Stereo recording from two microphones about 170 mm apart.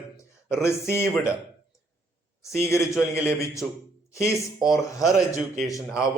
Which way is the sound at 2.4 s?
15° left (ahead or behind).